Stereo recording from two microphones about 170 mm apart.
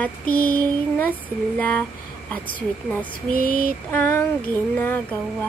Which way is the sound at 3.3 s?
55° left (ahead or behind).